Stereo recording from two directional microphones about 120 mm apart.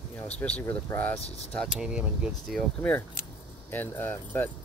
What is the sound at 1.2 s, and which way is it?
Speech, 60° left (ahead or behind).